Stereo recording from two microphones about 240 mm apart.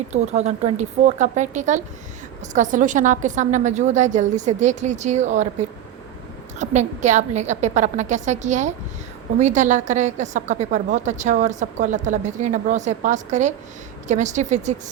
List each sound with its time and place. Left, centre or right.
0.1 s a woman's voice: right